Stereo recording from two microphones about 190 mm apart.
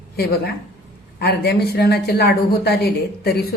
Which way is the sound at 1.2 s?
60° left (ahead or behind).